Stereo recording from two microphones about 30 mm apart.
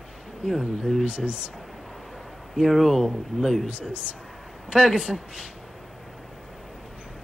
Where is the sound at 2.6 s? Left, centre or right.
Centre.